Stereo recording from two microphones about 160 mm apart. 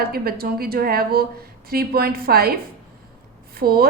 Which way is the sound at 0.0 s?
70° right (ahead or behind).